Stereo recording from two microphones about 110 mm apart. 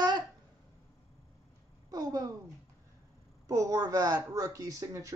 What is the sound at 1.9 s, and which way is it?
Speech, 35° right (ahead or behind).